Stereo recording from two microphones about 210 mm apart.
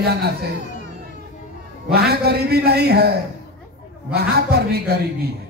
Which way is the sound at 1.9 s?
50° right (ahead or behind).